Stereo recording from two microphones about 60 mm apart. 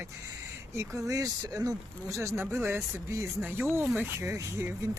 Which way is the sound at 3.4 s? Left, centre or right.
Right.